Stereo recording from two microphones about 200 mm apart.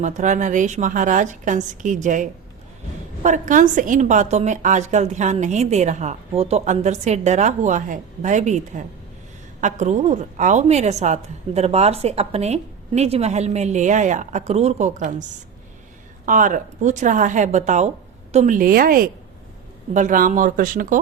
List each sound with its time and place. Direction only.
0.0 s a woman's voice: 35° right (ahead or behind)